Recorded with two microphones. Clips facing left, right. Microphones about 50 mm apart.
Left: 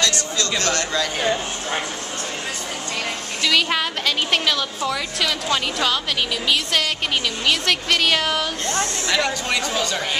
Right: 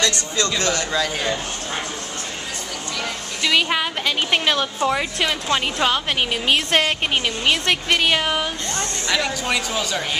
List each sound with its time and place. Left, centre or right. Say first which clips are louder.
0.0 s speech: right 1 dB; right
0.7 s speech: even; centre
3.6 s speech: even; centre
4.5 s a woman's voice: right 3 dB; right
7.4 s speech: even; centre
9.1 s a woman's voice: even; centre